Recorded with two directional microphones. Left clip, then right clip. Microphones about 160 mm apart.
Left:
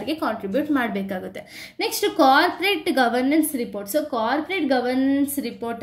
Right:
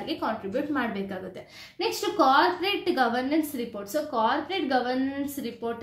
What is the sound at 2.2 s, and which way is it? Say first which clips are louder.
A woman's voice: left 4 dB; 40° left (ahead or behind).